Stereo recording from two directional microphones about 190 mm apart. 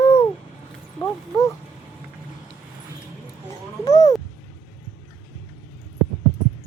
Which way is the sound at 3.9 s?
20° left (ahead or behind).